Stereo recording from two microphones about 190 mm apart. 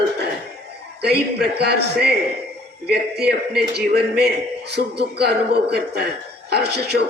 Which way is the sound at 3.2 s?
60° right (ahead or behind).